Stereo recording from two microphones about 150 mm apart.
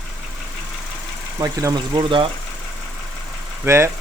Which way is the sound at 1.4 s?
20° right (ahead or behind).